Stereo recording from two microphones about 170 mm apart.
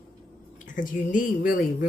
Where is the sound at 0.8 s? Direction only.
50° left (ahead or behind).